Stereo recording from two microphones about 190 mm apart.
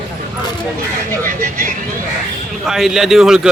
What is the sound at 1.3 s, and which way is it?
Speech, 45° right (ahead or behind).